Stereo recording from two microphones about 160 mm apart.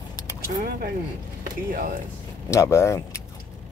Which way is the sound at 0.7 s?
70° right (ahead or behind).